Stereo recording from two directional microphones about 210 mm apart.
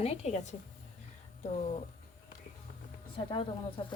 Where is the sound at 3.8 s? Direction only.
25° left (ahead or behind).